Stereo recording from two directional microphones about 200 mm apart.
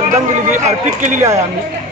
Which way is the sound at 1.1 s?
15° right (ahead or behind).